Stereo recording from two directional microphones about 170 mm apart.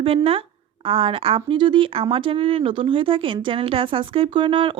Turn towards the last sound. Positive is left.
turn(degrees=-30)  # may be behind; listen again after turning